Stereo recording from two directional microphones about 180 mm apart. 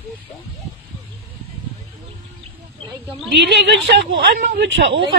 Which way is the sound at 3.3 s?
75° right (ahead or behind).